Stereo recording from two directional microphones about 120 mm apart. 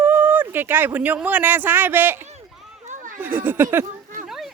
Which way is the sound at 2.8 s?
90° right.